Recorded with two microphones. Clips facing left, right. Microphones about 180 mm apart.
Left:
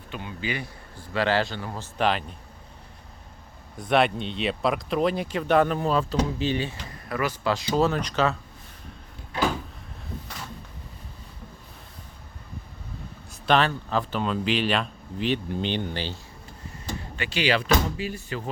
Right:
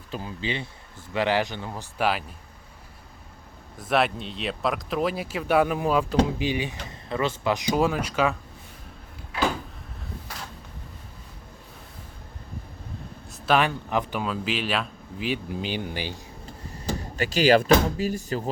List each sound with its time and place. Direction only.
0.1 s a man's voice: 35° right (ahead or behind); by 2.2 s 5° right (ahead or behind)
3.8 s a man's voice: centre (ahead or behind)
7.1 s a man's voice: 25° right (ahead or behind)
13.3 s speech: 5° right (ahead or behind)
14.3 s speech: 5° right (ahead or behind)
17.2 s speech: 40° right (ahead or behind)